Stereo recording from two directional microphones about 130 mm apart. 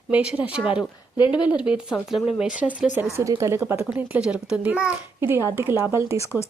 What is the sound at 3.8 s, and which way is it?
A child's voice, 10° right (ahead or behind).